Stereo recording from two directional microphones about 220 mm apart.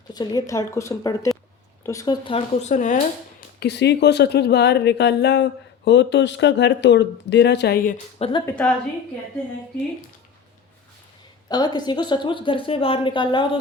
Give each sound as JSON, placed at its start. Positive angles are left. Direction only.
{"t": 0.1, "sound": "a woman's voice", "side_deg": 15}
{"t": 3.6, "sound": "speech", "side_deg": 50}
{"t": 8.2, "sound": "a woman's voice", "side_deg": 20}
{"t": 11.4, "sound": "a woman's voice", "side_deg": 20}